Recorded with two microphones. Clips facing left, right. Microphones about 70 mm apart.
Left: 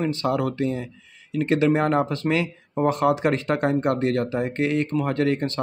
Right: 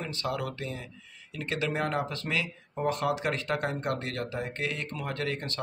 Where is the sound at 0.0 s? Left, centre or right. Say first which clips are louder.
Left 10 dB; left.